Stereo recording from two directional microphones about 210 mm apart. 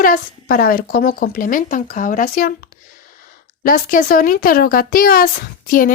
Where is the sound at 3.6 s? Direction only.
45° left (ahead or behind).